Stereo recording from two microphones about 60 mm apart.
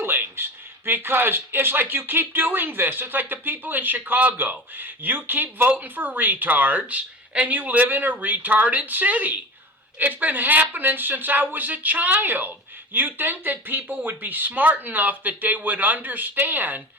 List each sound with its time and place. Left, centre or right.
0.0 s speech: right